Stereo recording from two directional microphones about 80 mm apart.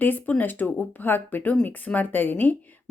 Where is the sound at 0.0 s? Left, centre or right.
Left.